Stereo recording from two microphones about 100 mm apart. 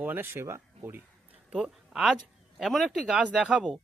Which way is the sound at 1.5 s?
10° right (ahead or behind).